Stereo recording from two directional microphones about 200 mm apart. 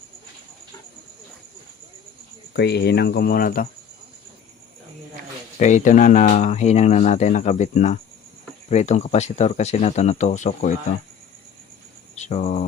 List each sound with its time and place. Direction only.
2.5 s speech: 55° left (ahead or behind)
5.5 s speech: 40° left (ahead or behind)
12.1 s cricket: 35° left (ahead or behind)